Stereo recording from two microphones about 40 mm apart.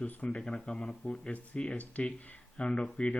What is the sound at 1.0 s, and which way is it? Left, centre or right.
Speech, left.